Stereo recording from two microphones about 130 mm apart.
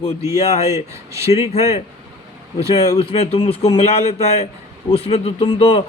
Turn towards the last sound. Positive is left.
turn(degrees=45)  # may be behind; listen again after turning